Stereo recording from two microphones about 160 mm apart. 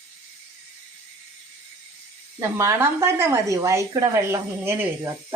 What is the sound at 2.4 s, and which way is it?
A woman's voice, 15° right (ahead or behind).